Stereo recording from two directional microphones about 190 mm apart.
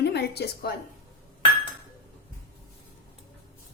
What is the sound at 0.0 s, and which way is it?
Speech, 60° left (ahead or behind).